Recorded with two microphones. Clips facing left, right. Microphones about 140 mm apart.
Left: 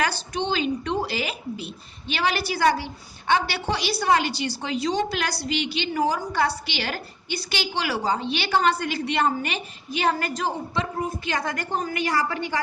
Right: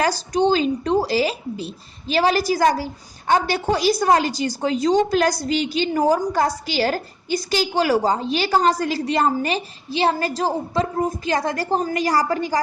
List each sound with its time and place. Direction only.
0.0 s a woman's voice: 40° right (ahead or behind)